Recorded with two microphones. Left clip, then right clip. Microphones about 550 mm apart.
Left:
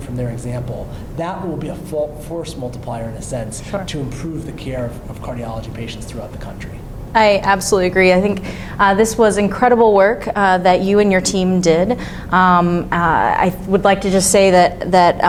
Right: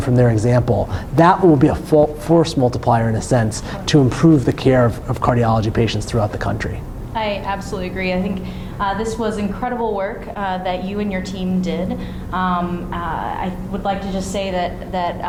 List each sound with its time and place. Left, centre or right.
0.2 s speech: right
7.1 s a woman's voice: left